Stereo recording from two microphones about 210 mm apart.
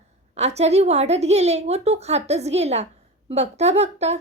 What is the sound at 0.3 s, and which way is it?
A woman's voice, 30° right (ahead or behind).